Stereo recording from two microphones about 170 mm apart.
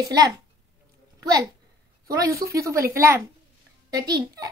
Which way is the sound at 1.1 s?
20° right (ahead or behind).